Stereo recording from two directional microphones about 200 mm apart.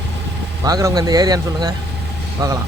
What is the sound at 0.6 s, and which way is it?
A man's voice, 15° right (ahead or behind).